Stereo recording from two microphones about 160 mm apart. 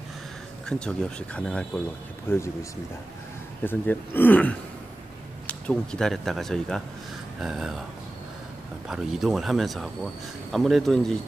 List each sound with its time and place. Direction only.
0.7 s speech: 5° left (ahead or behind)
2.2 s speech: 15° left (ahead or behind)
3.6 s speech: 10° left (ahead or behind)
8.8 s speech: 5° right (ahead or behind)